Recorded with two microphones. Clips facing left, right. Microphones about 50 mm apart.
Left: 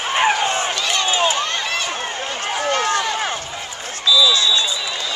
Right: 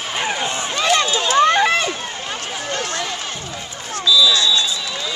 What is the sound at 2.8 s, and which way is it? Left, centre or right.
Run, left.